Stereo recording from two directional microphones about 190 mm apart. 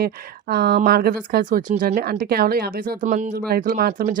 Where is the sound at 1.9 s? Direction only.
55° right (ahead or behind).